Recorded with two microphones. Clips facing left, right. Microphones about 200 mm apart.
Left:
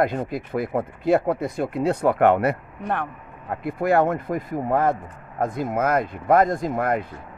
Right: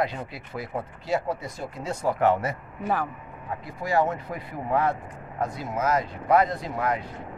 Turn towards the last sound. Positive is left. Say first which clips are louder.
# left 5 dB
turn(degrees=50)  # may be behind; listen again after turning